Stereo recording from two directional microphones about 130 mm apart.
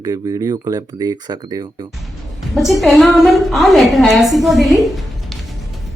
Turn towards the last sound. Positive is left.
turn(degrees=0)  # may be behind; listen again after turning